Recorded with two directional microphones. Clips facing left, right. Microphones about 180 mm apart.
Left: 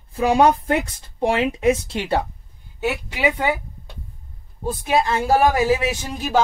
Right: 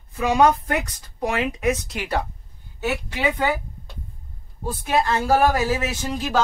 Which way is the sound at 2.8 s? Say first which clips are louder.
Left 2 dB; 10° left (ahead or behind).